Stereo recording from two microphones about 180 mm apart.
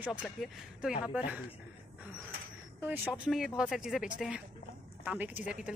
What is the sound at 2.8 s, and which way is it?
A woman's voice, 10° right (ahead or behind).